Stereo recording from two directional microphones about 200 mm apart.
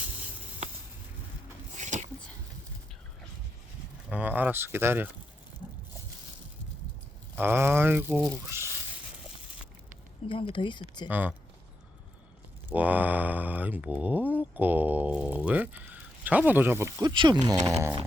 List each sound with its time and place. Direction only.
1.7 s a sound: 35° right (ahead or behind)
4.1 s speech: 10° right (ahead or behind)
7.3 s speech: 10° right (ahead or behind)
8.4 s a sound: 10° right (ahead or behind)
10.2 s speech: 25° left (ahead or behind)
11.1 s speech: 10° right (ahead or behind)
12.7 s speech: 5° right (ahead or behind)